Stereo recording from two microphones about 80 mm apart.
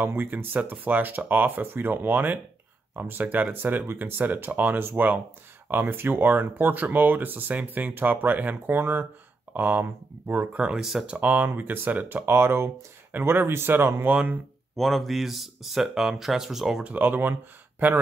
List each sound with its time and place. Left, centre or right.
0.0 s speech: right
10.8 s speech: centre
11.1 s speech: right
14.8 s speech: centre
16.8 s speech: centre